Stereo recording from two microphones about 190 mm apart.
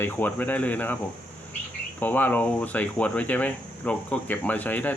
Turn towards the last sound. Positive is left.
turn(degrees=10)  # may be behind; listen again after turning